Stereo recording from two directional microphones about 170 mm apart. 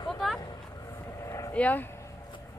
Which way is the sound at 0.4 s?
20° left (ahead or behind).